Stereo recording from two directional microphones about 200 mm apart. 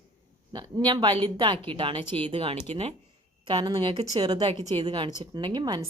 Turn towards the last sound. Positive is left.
turn(degrees=-20)  # may be behind; listen again after turning